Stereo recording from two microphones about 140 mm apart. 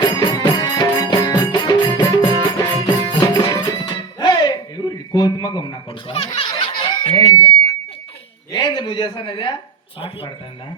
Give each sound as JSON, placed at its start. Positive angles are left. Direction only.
{"t": 0.0, "sound": "music", "side_deg": 30}
{"t": 4.2, "sound": "a sound", "side_deg": 30}
{"t": 6.1, "sound": "speech", "side_deg": 40}
{"t": 8.5, "sound": "a man's voice", "side_deg": 30}